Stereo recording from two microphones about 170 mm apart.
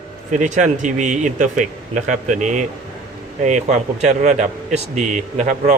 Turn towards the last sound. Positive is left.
turn(degrees=-45)  # may be behind; listen again after turning